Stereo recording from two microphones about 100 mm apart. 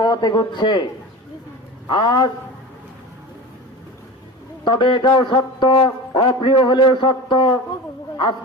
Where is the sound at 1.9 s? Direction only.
55° left (ahead or behind).